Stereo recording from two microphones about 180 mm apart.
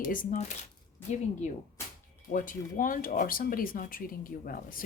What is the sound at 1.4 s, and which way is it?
A woman's voice, 40° left (ahead or behind).